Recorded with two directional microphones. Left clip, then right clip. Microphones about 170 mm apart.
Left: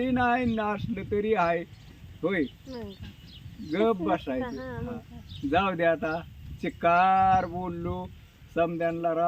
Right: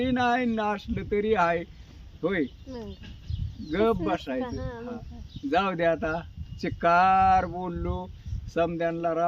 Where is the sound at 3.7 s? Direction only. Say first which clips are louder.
Even; 15° right (ahead or behind).